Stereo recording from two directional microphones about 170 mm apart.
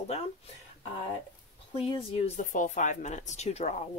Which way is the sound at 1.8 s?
30° left (ahead or behind).